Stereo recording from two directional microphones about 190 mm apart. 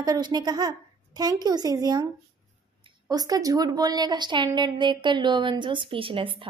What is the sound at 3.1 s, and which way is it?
A child's voice, 20° right (ahead or behind).